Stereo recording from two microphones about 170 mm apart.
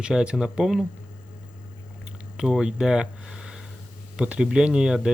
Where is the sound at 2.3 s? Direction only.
5° right (ahead or behind).